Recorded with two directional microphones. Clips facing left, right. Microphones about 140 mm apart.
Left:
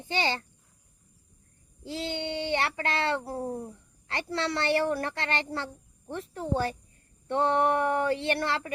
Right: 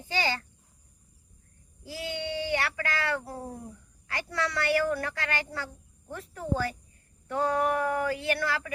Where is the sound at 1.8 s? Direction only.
25° left (ahead or behind).